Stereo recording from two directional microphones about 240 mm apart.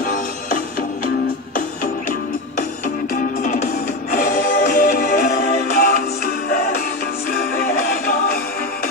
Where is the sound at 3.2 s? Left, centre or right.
Left.